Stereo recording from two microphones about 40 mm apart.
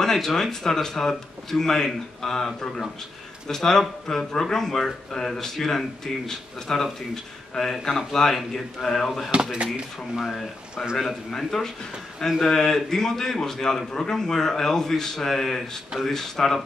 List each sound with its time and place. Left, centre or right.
0.0 s a man's voice: centre
9.3 s speech: right
10.2 s a man's voice: centre